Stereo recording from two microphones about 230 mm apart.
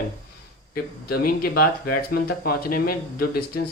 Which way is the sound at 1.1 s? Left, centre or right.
Left.